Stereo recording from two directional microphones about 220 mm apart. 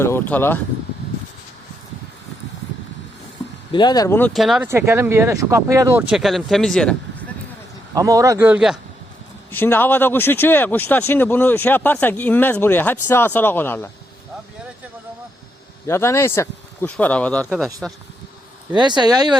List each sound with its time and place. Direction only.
0.0 s speech: 10° left (ahead or behind)
3.7 s speech: 20° left (ahead or behind)
4.4 s speech: centre (ahead or behind)
7.9 s speech: 15° right (ahead or behind)
9.5 s speech: 10° left (ahead or behind)
15.9 s speech: 10° left (ahead or behind)
17.8 s speech: 5° right (ahead or behind)
18.7 s speech: 20° right (ahead or behind)